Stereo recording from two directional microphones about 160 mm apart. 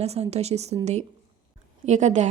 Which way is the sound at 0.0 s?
40° right (ahead or behind).